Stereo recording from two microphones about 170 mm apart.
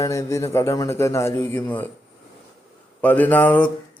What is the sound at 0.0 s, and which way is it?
A man's voice, 20° left (ahead or behind).